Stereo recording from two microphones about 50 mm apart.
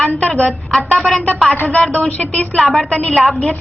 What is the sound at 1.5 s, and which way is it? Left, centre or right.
Speech, left.